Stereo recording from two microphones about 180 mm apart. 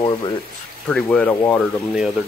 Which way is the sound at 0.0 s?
25° left (ahead or behind).